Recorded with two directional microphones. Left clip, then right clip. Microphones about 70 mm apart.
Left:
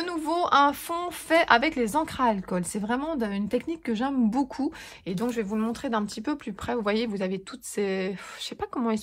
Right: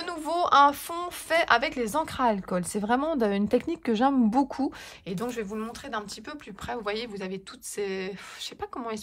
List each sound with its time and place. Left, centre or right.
0.0 s a woman's voice: right
1.9 s speech: right
5.2 s speech: right
5.6 s speech: centre